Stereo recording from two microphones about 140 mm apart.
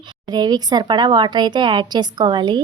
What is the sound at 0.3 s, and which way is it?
Speech, 30° right (ahead or behind).